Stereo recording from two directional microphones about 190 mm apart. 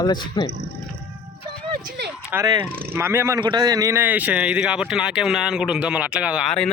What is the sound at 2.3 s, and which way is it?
A man's voice, 20° right (ahead or behind).